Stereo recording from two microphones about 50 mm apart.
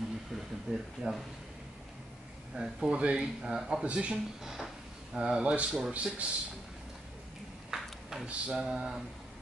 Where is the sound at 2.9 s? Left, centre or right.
Right.